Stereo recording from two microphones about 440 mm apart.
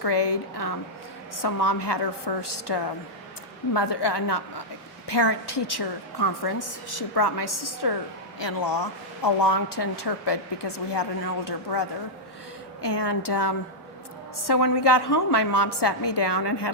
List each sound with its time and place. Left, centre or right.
0.0 s a woman's voice: left
8.4 s a woman's voice: left